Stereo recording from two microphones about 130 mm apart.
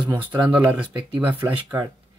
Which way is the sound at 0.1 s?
10° right (ahead or behind).